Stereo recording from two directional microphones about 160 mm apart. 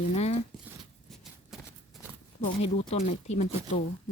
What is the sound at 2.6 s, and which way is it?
Speech, 45° left (ahead or behind).